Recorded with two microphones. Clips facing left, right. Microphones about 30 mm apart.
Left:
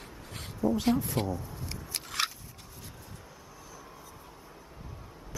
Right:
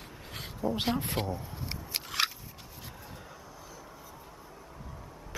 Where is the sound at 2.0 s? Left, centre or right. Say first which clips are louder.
Right 1 dB; centre.